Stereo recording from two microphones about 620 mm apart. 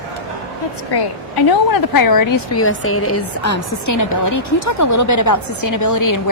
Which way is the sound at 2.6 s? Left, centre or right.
Left.